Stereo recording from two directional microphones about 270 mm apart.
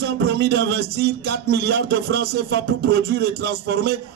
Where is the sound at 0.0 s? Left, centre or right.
Right.